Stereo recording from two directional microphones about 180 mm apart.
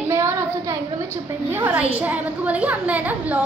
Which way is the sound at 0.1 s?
15° right (ahead or behind).